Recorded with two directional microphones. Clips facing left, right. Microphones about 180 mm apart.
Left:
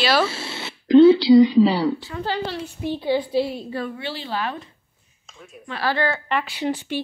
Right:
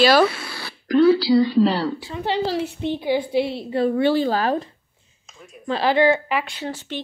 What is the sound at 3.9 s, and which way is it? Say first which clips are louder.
Speech: right 11 dB; 50° right (ahead or behind).